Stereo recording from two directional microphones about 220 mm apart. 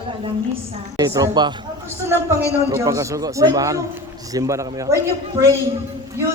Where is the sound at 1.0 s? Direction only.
15° right (ahead or behind).